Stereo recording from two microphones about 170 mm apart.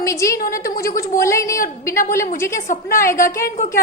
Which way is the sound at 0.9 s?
60° left (ahead or behind).